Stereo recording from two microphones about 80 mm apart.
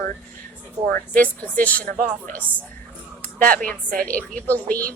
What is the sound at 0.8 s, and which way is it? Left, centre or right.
Speech, right.